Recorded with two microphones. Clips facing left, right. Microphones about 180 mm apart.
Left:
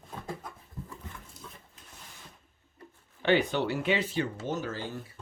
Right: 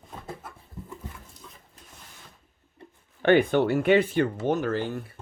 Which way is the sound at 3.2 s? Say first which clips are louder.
Right 6 dB; 55° right (ahead or behind).